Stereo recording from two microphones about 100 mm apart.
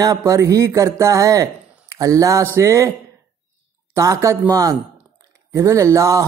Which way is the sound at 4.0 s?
30° right (ahead or behind).